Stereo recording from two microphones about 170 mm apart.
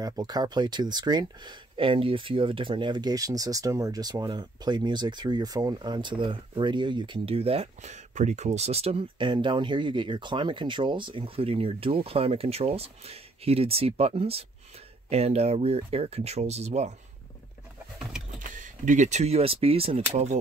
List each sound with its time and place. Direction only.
0.0 s speech: 25° right (ahead or behind); by 16.9 s 40° right (ahead or behind)
18.4 s speech: 50° right (ahead or behind)